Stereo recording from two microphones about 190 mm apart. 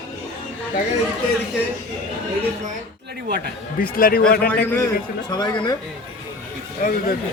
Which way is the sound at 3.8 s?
50° left (ahead or behind).